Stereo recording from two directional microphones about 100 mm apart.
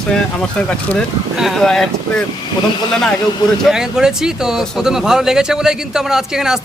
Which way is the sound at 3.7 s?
5° right (ahead or behind).